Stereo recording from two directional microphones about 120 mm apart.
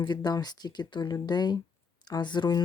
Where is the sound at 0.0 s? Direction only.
35° left (ahead or behind).